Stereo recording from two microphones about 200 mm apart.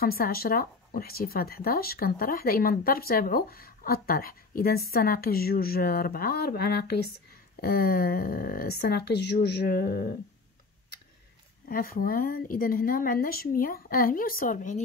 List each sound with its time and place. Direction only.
0.0 s speech: 50° left (ahead or behind)
11.6 s speech: 45° left (ahead or behind)